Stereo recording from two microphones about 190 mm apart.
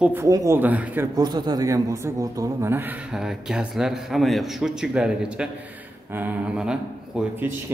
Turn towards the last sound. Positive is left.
turn(degrees=-5)  # may be behind; listen again after turning